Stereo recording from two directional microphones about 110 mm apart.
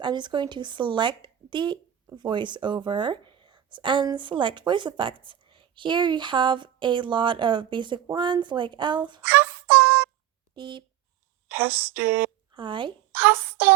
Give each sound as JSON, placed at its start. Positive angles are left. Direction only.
{"t": 0.0, "sound": "a woman's voice", "side_deg": -45}
{"t": 9.2, "sound": "synthetic singing", "side_deg": -20}
{"t": 10.5, "sound": "speech", "side_deg": -45}
{"t": 11.4, "sound": "speech", "side_deg": -20}
{"t": 12.5, "sound": "speech", "side_deg": -50}
{"t": 13.1, "sound": "speech", "side_deg": -20}